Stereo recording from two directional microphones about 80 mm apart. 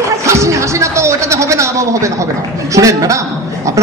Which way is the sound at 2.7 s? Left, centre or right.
Right.